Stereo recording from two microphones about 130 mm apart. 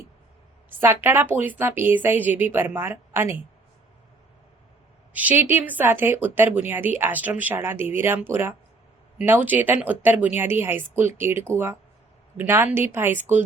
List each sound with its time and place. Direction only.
0.8 s speech: 15° right (ahead or behind)
5.1 s speech: 15° right (ahead or behind)